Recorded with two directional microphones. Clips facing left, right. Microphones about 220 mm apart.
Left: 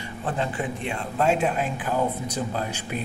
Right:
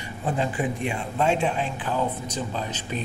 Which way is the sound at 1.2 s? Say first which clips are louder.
Left 1 dB; 5° left (ahead or behind).